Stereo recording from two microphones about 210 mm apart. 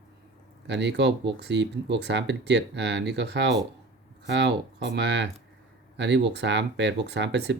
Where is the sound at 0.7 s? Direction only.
55° right (ahead or behind).